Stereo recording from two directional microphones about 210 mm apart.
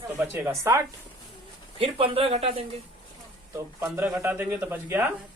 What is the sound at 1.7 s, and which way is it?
Speech, 25° right (ahead or behind).